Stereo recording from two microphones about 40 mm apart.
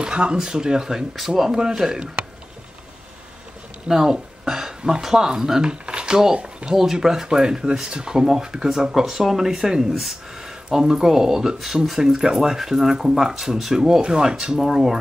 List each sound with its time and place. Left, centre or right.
0.0 s speech: right
3.9 s speech: centre
6.7 s speech: centre